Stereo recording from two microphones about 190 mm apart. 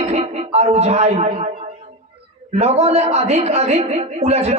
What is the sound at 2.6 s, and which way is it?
Speech, 35° right (ahead or behind).